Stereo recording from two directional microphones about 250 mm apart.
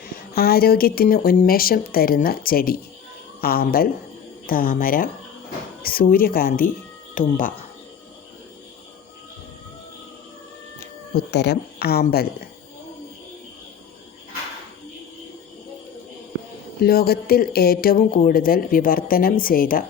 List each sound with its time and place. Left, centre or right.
0.3 s speech: left
11.3 s speech: left
16.8 s speech: left